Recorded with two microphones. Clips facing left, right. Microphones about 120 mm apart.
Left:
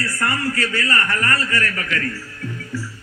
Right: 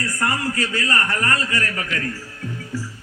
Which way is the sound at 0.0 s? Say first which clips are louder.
Even; 15° right (ahead or behind).